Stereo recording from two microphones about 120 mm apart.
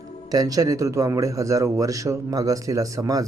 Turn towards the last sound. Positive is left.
turn(degrees=-30)  # may be behind; listen again after turning